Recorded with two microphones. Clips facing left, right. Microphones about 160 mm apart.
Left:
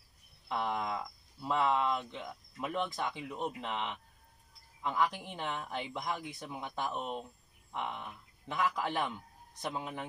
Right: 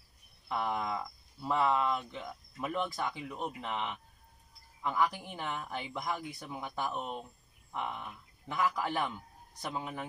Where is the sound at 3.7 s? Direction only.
10° right (ahead or behind).